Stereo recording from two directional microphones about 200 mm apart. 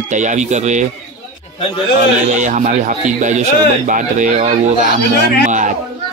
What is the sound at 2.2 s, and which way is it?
A child's voice, 40° right (ahead or behind).